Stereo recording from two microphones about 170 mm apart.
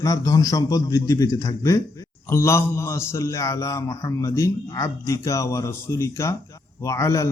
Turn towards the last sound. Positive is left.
turn(degrees=15)  # may be behind; listen again after turning